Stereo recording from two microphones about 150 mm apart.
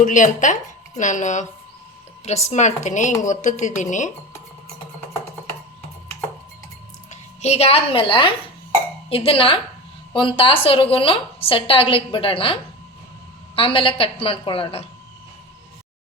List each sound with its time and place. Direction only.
0.0 s a woman's voice: 55° left (ahead or behind)
7.1 s a woman's voice: 45° left (ahead or behind)
13.6 s a woman's voice: 35° left (ahead or behind)